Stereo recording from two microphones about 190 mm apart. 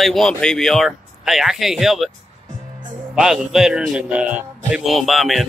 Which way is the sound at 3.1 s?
5° right (ahead or behind).